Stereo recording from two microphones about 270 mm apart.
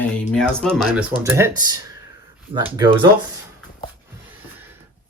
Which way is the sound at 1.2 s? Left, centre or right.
Centre.